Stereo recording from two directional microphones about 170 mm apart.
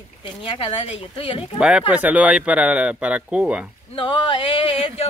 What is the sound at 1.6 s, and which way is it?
Speech, 5° right (ahead or behind).